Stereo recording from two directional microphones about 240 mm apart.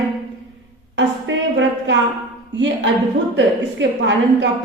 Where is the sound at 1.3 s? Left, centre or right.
Right.